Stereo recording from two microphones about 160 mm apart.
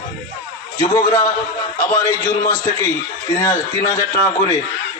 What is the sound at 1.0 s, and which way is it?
A man's voice, 20° left (ahead or behind).